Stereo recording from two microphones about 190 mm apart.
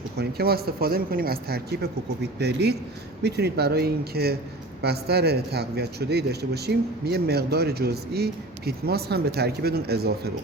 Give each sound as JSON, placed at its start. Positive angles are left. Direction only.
{"t": 0.2, "sound": "a man's voice", "side_deg": -55}